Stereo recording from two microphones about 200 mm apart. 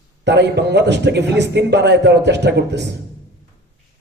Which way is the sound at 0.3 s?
60° right (ahead or behind).